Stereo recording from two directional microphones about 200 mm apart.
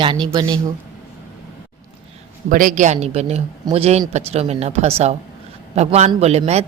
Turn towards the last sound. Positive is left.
turn(degrees=-30)  # may be behind; listen again after turning